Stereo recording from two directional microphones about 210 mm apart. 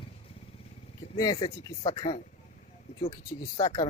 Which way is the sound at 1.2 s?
20° left (ahead or behind).